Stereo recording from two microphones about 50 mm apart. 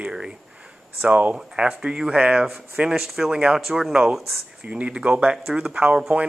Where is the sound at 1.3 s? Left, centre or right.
Centre.